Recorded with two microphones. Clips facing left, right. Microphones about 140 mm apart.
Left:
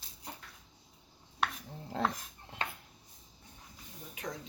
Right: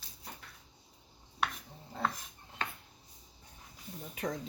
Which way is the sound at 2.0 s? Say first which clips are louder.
Left 2 dB; 90° left.